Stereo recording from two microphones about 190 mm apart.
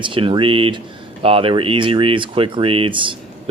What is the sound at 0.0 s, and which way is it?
Speech, 25° right (ahead or behind).